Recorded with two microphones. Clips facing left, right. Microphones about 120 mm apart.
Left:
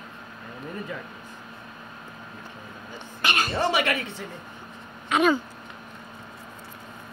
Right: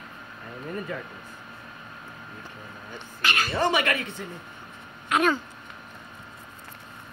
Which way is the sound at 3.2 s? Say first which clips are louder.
Even; 20° left (ahead or behind).